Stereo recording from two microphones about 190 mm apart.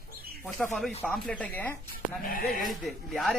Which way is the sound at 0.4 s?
Centre (ahead or behind).